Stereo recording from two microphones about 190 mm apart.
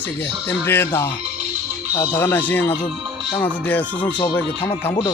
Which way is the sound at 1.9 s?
15° left (ahead or behind).